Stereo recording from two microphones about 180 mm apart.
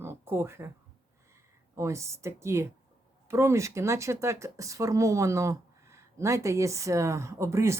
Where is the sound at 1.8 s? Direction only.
15° right (ahead or behind).